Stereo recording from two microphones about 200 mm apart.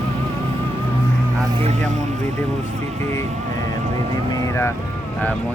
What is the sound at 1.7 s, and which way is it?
Speech, 35° right (ahead or behind).